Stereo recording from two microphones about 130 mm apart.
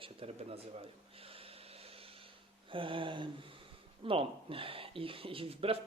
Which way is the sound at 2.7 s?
40° right (ahead or behind).